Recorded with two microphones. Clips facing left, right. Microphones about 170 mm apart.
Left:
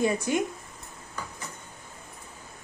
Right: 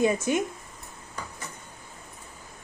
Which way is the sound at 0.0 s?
20° right (ahead or behind).